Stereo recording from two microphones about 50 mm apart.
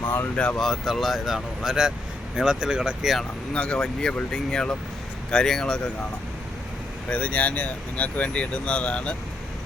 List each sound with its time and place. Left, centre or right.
0.3 s speech: left
0.6 s speech: centre
3.5 s speech: centre
7.1 s speech: left